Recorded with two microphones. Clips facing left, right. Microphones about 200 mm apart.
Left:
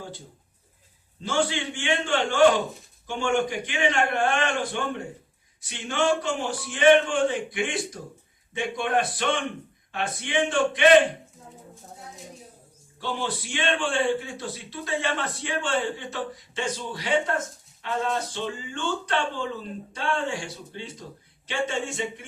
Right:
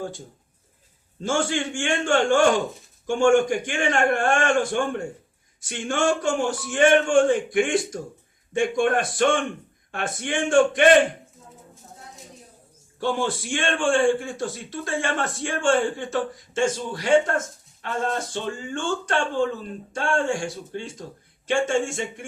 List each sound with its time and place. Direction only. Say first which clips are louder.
1.2 s a man's voice: right 2 dB; 45° right (ahead or behind)
13.0 s a man's voice: right 6 dB; 45° right (ahead or behind)